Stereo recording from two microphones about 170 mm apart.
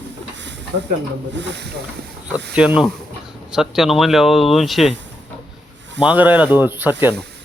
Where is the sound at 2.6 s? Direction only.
5° right (ahead or behind).